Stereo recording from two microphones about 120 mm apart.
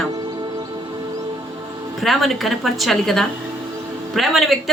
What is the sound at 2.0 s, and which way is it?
Speech, centre (ahead or behind).